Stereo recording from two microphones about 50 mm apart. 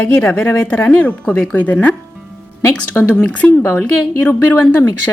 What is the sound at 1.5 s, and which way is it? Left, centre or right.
Speech, left.